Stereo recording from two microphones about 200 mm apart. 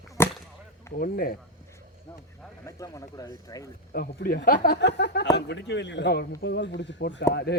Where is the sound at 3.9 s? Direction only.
45° left (ahead or behind).